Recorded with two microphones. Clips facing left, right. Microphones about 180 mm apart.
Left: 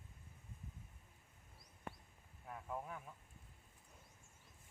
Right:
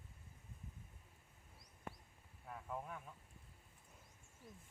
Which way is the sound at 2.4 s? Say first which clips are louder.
Left 1 dB; centre (ahead or behind).